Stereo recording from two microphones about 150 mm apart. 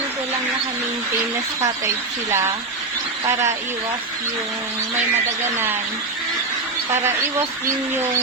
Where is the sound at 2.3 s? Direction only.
15° right (ahead or behind).